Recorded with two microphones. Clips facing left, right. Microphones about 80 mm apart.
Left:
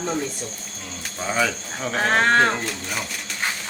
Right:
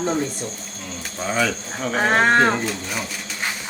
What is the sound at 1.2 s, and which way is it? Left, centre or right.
A woman's voice, centre.